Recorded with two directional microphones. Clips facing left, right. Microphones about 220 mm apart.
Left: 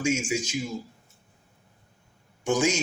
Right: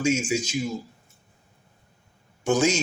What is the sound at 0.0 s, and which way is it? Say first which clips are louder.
Speech: right 3 dB; 15° left (ahead or behind).